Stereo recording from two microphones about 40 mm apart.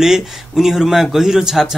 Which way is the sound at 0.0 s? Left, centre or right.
Centre.